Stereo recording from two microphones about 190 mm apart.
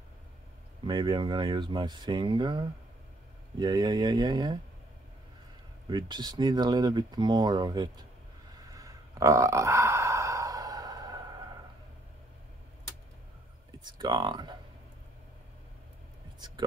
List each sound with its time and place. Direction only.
0.8 s speech: 25° right (ahead or behind)
5.9 s speech: 25° right (ahead or behind)
8.7 s a sound: 15° right (ahead or behind)
13.8 s speech: 20° right (ahead or behind)